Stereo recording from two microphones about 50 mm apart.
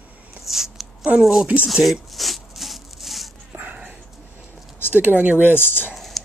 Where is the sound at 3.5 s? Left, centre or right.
Right.